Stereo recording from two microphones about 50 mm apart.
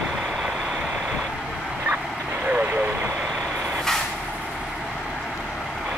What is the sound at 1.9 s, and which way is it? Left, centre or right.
Vehicle, right.